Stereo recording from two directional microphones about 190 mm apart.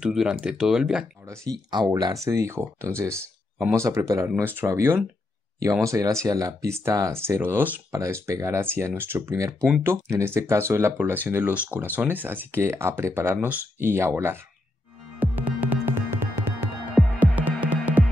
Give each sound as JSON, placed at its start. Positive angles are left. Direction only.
{"t": 0.0, "sound": "speech", "side_deg": -5}
{"t": 1.3, "sound": "speech", "side_deg": -15}
{"t": 15.1, "sound": "music", "side_deg": -10}